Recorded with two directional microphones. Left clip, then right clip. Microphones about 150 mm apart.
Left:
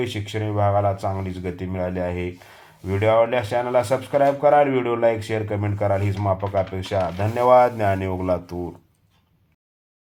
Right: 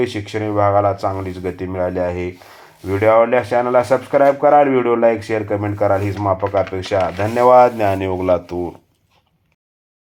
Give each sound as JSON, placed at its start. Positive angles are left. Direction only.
{"t": 0.0, "sound": "speech", "side_deg": -25}